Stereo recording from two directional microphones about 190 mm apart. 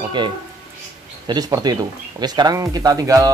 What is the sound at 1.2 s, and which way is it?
Speech, 20° right (ahead or behind).